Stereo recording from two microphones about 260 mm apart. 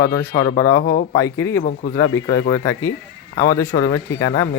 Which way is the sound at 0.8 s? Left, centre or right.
Left.